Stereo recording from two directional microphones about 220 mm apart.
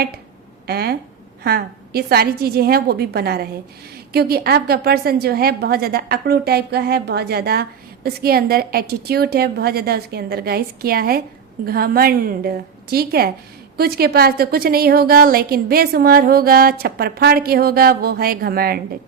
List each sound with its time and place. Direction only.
0.7 s a woman's voice: 45° right (ahead or behind)